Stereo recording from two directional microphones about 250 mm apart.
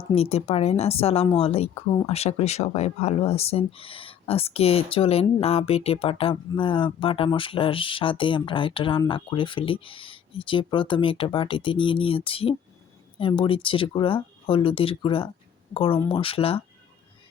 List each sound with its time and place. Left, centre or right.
0.1 s speech: left